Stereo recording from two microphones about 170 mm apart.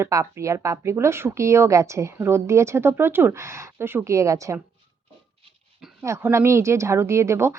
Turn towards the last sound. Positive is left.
turn(degrees=-15)  # may be behind; listen again after turning